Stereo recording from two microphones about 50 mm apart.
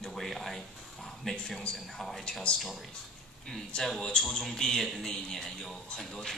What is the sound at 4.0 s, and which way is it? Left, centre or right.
A man's voice, centre.